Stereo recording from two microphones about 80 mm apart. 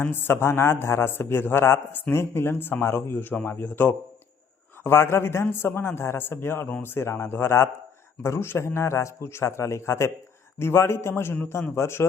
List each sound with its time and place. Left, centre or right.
0.0 s a man's voice: left